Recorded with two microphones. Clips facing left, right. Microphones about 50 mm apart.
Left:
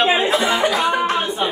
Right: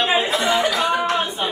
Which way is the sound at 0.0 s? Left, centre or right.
Left.